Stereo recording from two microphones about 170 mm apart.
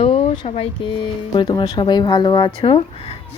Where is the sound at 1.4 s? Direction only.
25° left (ahead or behind).